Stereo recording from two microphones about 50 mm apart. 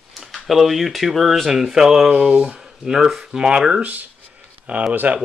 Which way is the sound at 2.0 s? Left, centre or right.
Right.